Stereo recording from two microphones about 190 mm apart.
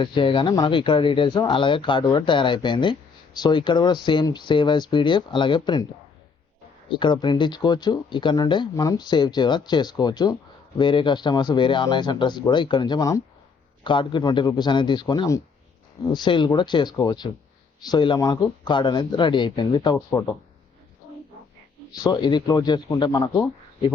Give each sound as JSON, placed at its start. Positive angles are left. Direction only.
{"t": 0.0, "sound": "speech", "side_deg": 25}
{"t": 6.8, "sound": "speech", "side_deg": 25}
{"t": 22.0, "sound": "speech", "side_deg": 20}